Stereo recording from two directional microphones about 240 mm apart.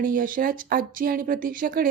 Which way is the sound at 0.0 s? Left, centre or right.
Right.